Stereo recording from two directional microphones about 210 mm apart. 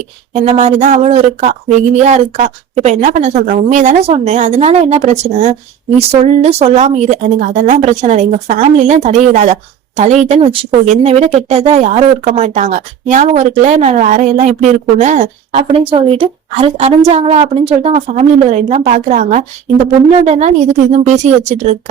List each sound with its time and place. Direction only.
0.3 s speech: 35° right (ahead or behind)